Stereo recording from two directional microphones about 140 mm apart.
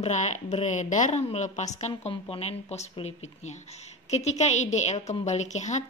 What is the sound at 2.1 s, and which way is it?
A woman's voice, 45° left (ahead or behind).